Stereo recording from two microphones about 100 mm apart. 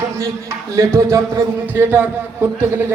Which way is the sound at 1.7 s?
15° right (ahead or behind).